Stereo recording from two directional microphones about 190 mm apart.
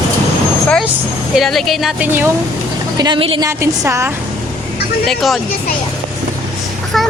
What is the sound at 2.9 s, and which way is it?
Speech, 25° right (ahead or behind).